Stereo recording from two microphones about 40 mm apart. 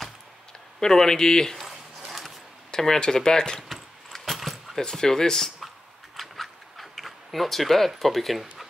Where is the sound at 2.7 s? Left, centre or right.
Centre.